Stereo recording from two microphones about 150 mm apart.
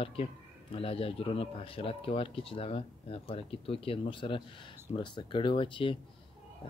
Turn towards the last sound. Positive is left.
turn(degrees=35)  # may be behind; listen again after turning